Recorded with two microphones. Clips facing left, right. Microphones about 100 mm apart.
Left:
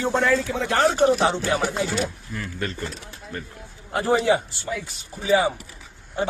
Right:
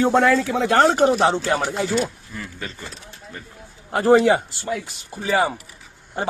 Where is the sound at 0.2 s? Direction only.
90° right; by 1.0 s 70° right (ahead or behind).